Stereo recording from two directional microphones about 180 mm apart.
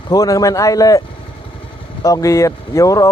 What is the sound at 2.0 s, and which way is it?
Speech, 20° left (ahead or behind).